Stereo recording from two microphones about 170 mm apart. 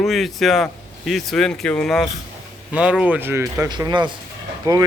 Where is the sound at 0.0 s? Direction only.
Centre (ahead or behind).